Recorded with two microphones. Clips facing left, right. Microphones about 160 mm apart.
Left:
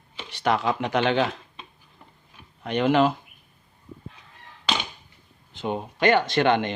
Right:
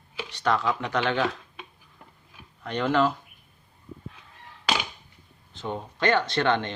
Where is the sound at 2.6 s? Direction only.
20° left (ahead or behind).